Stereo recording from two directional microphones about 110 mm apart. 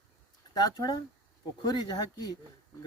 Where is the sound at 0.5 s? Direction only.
35° left (ahead or behind).